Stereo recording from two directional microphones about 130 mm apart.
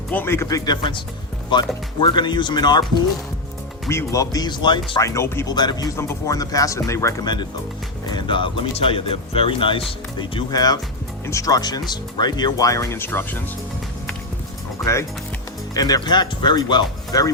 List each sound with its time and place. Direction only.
0.1 s speech: 15° left (ahead or behind); by 2.8 s 35° left (ahead or behind)
3.8 s speech: 25° left (ahead or behind)
5.0 s speech: 20° left (ahead or behind)
5.5 s speech: 35° left (ahead or behind)
6.0 s speech: 25° left (ahead or behind)
8.0 s speech: 35° left (ahead or behind); by 13.4 s 15° left (ahead or behind)
14.8 s speech: centre (ahead or behind)
15.7 s speech: 30° left (ahead or behind)